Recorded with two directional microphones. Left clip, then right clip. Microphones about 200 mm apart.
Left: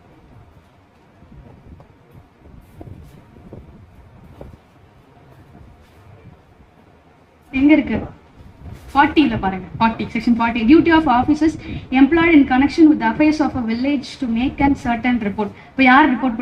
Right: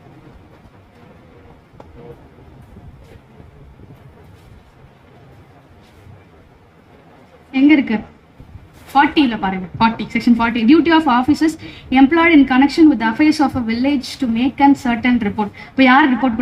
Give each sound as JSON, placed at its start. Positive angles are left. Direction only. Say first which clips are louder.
{"t": 7.5, "sound": "a woman's voice", "louder": "right 1 dB", "side_deg": -45}